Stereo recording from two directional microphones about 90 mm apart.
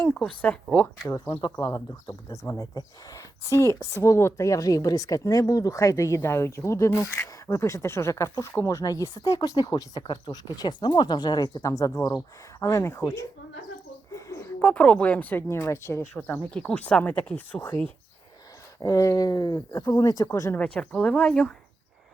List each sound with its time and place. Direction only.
0.0 s speech: 15° left (ahead or behind)
1.6 s speech: 45° left (ahead or behind)
14.1 s a sound: 35° left (ahead or behind)
14.6 s speech: 15° left (ahead or behind); by 16.0 s 30° left (ahead or behind)
16.1 s speech: 20° left (ahead or behind)
18.8 s speech: 40° left (ahead or behind)
20.7 s speech: 10° left (ahead or behind)